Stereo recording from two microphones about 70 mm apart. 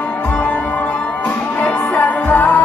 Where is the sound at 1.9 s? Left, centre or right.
Left.